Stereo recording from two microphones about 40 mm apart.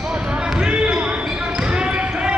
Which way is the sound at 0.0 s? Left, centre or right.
Right.